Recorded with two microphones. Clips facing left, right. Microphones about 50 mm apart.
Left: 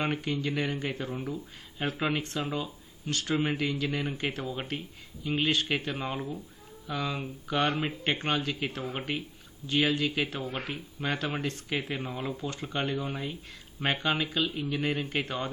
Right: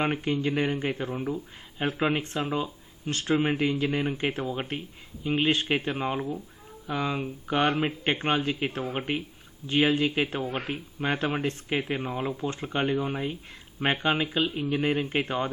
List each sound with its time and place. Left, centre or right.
0.0 s speech: right
4.4 s speech: centre
12.0 s speech: centre